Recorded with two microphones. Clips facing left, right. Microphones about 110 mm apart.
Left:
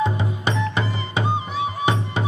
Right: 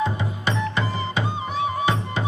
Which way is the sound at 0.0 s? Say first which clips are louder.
Left 2 dB; 20° left (ahead or behind).